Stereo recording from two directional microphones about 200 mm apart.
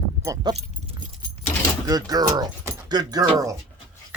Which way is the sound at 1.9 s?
20° right (ahead or behind).